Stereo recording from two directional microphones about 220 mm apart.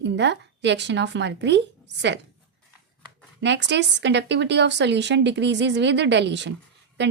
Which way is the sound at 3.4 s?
55° right (ahead or behind).